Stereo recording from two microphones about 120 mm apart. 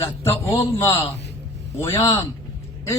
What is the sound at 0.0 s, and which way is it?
Speech, 25° left (ahead or behind).